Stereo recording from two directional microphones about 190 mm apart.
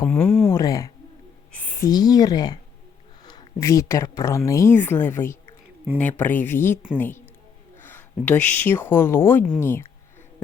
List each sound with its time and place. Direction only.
0.1 s speech: 5° left (ahead or behind)
0.4 s speech: 15° left (ahead or behind)
1.5 s a sound: 10° left (ahead or behind)
1.9 s a woman's voice: 20° left (ahead or behind)